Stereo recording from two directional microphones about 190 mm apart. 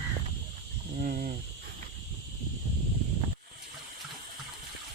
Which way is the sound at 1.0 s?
50° right (ahead or behind).